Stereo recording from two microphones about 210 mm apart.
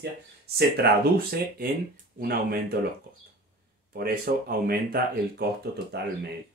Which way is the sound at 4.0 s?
45° right (ahead or behind).